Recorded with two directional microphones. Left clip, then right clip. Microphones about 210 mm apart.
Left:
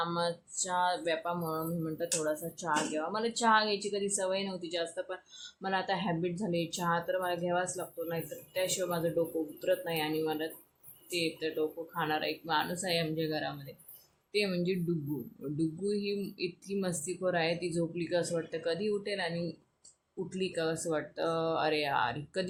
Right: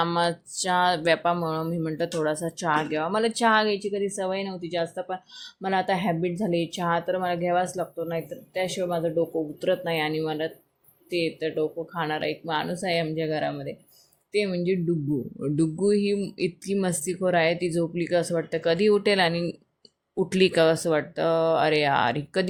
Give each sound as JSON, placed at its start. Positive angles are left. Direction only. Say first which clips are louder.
{"t": 0.0, "sound": "speech", "louder": "right 9 dB", "side_deg": -35}